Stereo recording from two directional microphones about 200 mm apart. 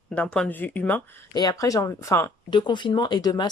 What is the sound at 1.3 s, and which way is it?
Speech, 20° left (ahead or behind).